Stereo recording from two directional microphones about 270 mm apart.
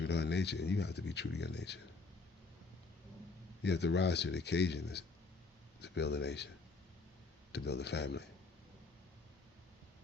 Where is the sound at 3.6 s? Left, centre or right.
Left.